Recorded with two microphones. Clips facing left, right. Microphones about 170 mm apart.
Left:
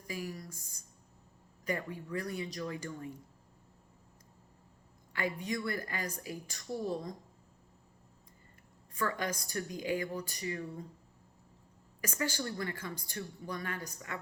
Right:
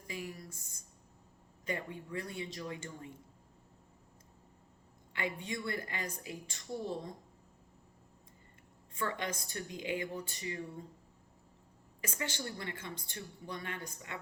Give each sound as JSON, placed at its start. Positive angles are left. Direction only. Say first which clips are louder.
{"t": 0.3, "sound": "a woman's voice", "louder": "left 3 dB", "side_deg": -25}
{"t": 5.1, "sound": "a woman's voice", "louder": "left 3 dB", "side_deg": -25}
{"t": 9.0, "sound": "a woman's voice", "louder": "left 2 dB", "side_deg": -25}
{"t": 12.0, "sound": "a woman's voice", "louder": "left 4 dB", "side_deg": -25}